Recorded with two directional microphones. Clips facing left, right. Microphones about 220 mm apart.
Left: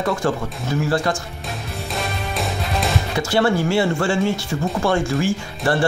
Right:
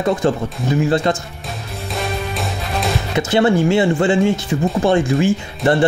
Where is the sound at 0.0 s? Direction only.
20° right (ahead or behind).